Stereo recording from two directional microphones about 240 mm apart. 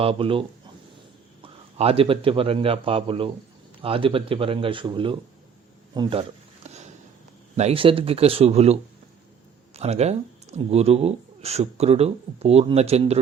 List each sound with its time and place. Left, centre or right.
0.0 s a man's voice: right
5.9 s a sound: centre
7.5 s speech: right